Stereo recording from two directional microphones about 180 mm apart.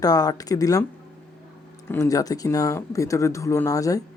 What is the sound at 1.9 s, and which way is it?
Speech, 15° left (ahead or behind).